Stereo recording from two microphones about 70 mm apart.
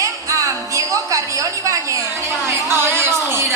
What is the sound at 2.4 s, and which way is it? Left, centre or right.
Speech, right.